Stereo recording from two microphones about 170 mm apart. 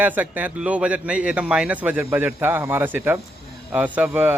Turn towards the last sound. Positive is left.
turn(degrees=-10)  # may be behind; listen again after turning